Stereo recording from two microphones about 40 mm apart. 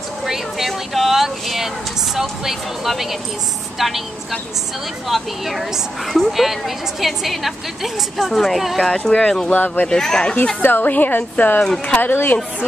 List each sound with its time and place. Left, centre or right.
0.2 s a sound: centre
0.7 s a woman's voice: centre
5.0 s a woman's voice: centre
8.8 s speech: centre
9.5 s speech: left
9.8 s speech: centre
10.6 s a woman's voice: left